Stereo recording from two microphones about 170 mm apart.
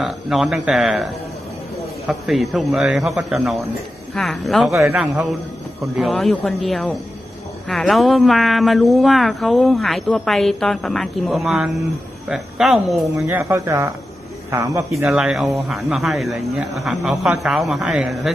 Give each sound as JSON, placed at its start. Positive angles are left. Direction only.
{"t": 0.0, "sound": "speech", "side_deg": 0}
{"t": 2.0, "sound": "speech", "side_deg": 0}
{"t": 13.1, "sound": "speech", "side_deg": -15}
{"t": 15.0, "sound": "speech", "side_deg": -5}